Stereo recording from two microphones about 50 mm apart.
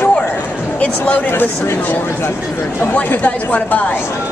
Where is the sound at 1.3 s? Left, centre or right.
Left.